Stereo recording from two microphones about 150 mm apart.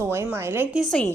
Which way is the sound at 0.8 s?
5° left (ahead or behind).